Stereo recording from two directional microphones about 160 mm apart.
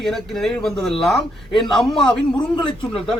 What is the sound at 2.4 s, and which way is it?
Speech, 30° left (ahead or behind).